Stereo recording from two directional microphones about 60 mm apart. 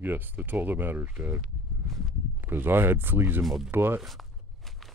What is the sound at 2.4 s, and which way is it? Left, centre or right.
Speech, right.